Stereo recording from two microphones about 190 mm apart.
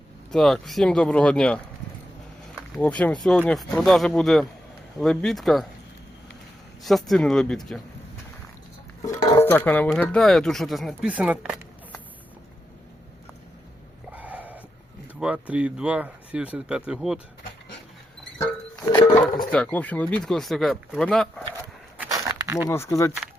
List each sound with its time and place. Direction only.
0.3 s speech: centre (ahead or behind)
2.7 s speech: 5° left (ahead or behind)
6.8 s speech: centre (ahead or behind)
9.0 s speech: 15° left (ahead or behind); by 11.6 s 5° right (ahead or behind)
14.1 s a sound: 10° right (ahead or behind)
15.2 s speech: 5° right (ahead or behind)
18.9 s a sound: 15° left (ahead or behind)
19.5 s speech: 5° left (ahead or behind)
21.9 s a sound: 15° right (ahead or behind)
22.5 s speech: 15° left (ahead or behind)